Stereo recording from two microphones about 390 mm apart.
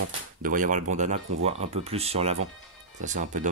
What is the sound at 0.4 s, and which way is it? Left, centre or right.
Speech, right.